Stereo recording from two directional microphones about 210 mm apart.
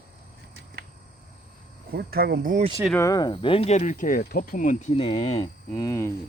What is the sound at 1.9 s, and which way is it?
Speech, 45° right (ahead or behind).